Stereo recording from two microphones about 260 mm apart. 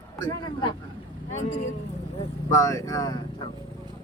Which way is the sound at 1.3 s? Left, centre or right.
Left.